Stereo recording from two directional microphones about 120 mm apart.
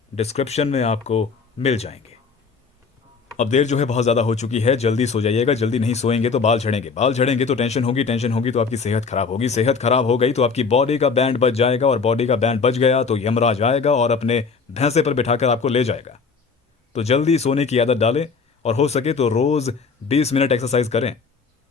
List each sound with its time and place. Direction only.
0.2 s speech: 65° left (ahead or behind)
3.3 s speech: 80° left